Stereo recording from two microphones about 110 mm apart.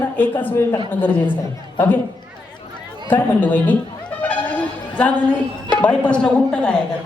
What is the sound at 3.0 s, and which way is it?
Speech, 15° left (ahead or behind).